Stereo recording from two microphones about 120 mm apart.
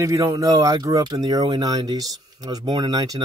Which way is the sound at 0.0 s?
25° right (ahead or behind).